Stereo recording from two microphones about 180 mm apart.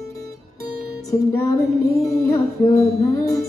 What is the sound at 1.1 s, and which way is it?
Music, 10° left (ahead or behind).